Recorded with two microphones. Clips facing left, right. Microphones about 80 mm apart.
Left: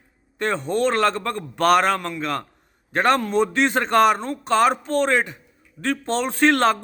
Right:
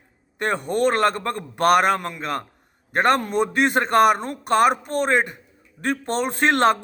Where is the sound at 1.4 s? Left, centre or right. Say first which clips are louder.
Even; centre.